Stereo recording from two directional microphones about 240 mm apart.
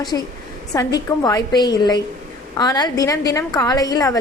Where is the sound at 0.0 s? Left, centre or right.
Centre.